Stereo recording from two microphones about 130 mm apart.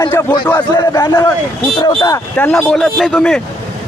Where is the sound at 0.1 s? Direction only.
15° left (ahead or behind).